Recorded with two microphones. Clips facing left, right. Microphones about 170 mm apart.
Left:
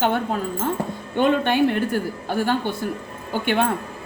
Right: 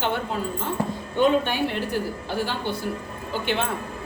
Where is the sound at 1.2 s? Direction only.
55° left (ahead or behind).